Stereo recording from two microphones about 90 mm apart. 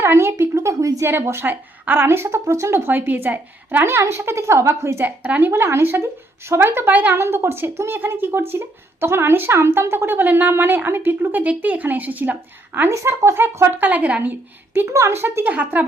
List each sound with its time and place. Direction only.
0.0 s a woman's voice: 25° right (ahead or behind)
5.0 s speech: 15° right (ahead or behind)
5.5 s speech: 30° right (ahead or behind)
14.8 s speech: 35° right (ahead or behind)